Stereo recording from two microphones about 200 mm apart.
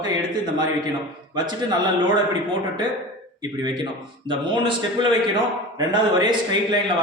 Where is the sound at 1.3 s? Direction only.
20° right (ahead or behind).